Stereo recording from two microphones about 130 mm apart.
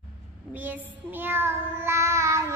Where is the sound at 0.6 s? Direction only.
15° right (ahead or behind).